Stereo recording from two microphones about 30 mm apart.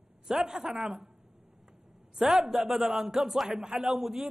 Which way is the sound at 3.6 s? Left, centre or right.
Right.